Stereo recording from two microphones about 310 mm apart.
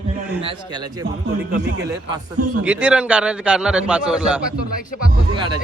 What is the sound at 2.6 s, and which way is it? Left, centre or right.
A man's voice, centre.